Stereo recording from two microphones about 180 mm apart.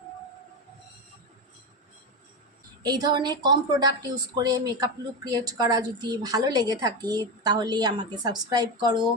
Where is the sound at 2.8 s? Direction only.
25° right (ahead or behind).